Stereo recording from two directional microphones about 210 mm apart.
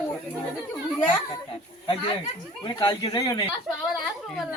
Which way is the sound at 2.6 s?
20° left (ahead or behind).